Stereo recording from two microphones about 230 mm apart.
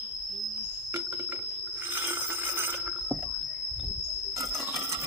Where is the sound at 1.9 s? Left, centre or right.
Centre.